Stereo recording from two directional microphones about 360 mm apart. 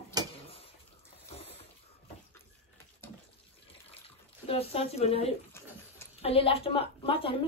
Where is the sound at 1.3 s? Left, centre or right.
Centre.